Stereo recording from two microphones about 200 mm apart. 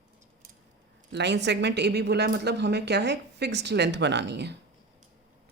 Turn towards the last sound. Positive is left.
turn(degrees=-60)  # may be behind; listen again after turning